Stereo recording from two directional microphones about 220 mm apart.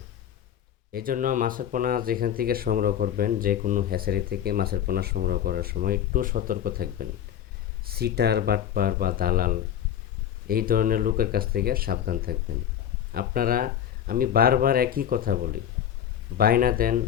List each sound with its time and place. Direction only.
0.9 s speech: 40° right (ahead or behind)